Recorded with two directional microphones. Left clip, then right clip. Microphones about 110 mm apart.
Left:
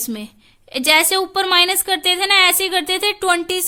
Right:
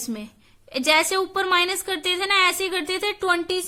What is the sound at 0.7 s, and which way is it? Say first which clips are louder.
A woman's voice: left 5 dB; 35° left (ahead or behind).